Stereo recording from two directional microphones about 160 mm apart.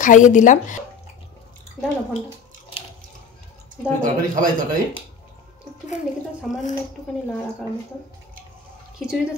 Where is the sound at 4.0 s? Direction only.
55° right (ahead or behind).